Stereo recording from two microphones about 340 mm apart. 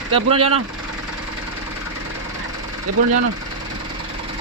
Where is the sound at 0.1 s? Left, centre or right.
Centre.